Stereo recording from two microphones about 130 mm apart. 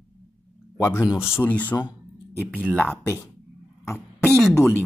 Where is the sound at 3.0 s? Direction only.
20° left (ahead or behind).